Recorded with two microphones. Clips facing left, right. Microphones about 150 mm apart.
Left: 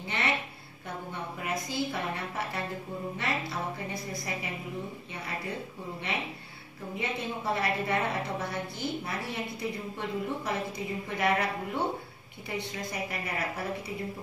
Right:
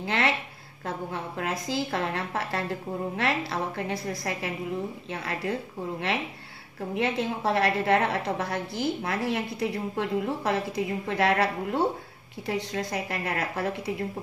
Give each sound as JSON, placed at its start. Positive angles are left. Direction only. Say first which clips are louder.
{"t": 0.0, "sound": "a woman's voice", "louder": "right 5 dB", "side_deg": -90}
{"t": 7.0, "sound": "a woman's voice", "louder": "right 7 dB", "side_deg": -90}